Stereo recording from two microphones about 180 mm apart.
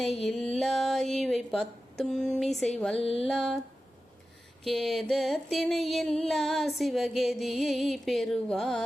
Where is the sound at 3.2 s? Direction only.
5° left (ahead or behind).